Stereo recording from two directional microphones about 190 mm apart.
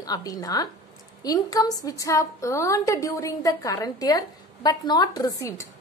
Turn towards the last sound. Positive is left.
turn(degrees=15)  # may be behind; listen again after turning